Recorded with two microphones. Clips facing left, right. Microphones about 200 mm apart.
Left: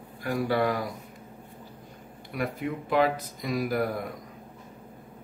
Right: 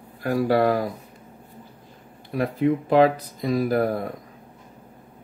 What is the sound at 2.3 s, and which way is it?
Speech, 35° right (ahead or behind).